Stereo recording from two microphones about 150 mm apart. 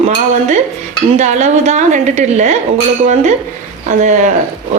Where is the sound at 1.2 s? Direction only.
50° right (ahead or behind).